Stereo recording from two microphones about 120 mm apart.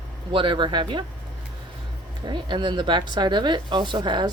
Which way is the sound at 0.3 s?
45° right (ahead or behind).